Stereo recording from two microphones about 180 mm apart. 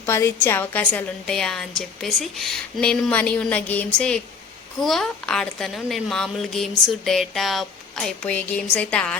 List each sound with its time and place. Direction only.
0.0 s a woman's voice: 15° left (ahead or behind)